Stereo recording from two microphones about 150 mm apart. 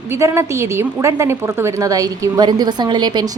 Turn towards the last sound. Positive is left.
turn(degrees=-30)  # may be behind; listen again after turning